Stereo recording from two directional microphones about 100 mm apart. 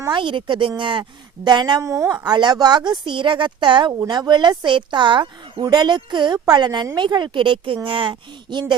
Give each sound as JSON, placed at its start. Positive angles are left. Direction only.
{"t": 0.1, "sound": "speech", "side_deg": -55}
{"t": 1.8, "sound": "speech", "side_deg": -30}
{"t": 2.2, "sound": "speech", "side_deg": -45}